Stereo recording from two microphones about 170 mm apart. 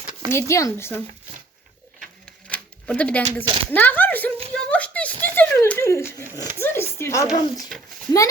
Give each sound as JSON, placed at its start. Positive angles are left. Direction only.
{"t": 0.3, "sound": "speech", "side_deg": 15}
{"t": 2.0, "sound": "a sound", "side_deg": 5}
{"t": 3.4, "sound": "speech", "side_deg": -30}
{"t": 3.8, "sound": "speech", "side_deg": 10}